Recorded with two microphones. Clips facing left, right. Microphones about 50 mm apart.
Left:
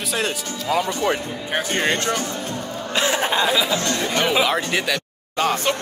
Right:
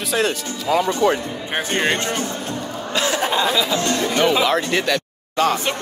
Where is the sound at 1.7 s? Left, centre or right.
Right.